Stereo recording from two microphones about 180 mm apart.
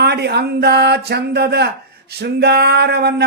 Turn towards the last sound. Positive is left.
turn(degrees=-65)  # may be behind; listen again after turning